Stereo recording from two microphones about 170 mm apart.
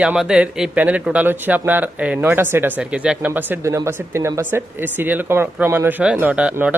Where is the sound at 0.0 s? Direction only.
5° right (ahead or behind).